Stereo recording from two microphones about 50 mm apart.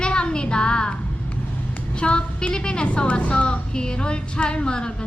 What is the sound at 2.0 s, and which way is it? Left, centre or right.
A woman's voice, centre.